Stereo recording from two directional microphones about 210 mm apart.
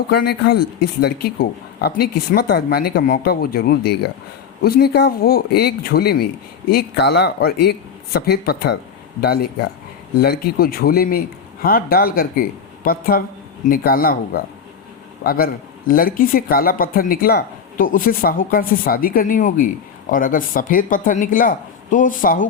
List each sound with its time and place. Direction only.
0.1 s a man's voice: 50° left (ahead or behind)